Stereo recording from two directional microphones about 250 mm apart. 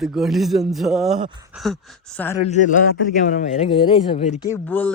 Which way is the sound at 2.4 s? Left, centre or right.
Left.